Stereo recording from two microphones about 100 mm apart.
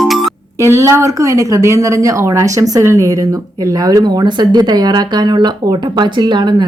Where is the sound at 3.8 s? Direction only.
40° right (ahead or behind).